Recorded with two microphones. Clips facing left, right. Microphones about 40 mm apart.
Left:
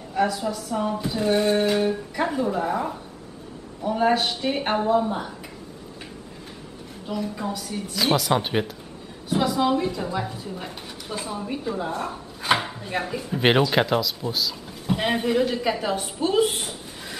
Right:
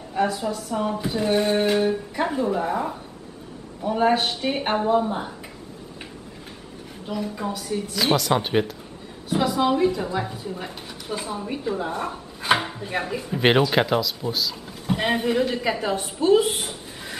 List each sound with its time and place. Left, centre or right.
0.1 s a woman's voice: centre
3.9 s speech: centre
7.1 s speech: centre
16.6 s chuckle: centre